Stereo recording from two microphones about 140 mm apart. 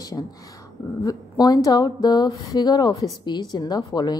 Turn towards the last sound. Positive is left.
turn(degrees=30)  # may be behind; listen again after turning